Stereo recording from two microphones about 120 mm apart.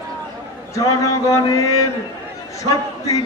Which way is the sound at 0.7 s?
25° left (ahead or behind).